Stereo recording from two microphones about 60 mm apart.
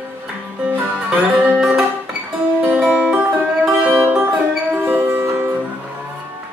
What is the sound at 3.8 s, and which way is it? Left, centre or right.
Music, right.